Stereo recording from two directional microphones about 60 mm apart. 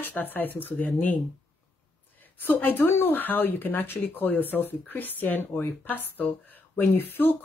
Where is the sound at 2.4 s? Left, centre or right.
Left.